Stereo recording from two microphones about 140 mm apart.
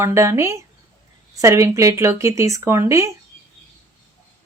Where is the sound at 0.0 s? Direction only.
20° right (ahead or behind).